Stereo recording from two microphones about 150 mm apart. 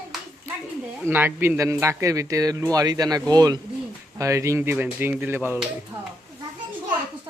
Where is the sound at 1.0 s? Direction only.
15° right (ahead or behind).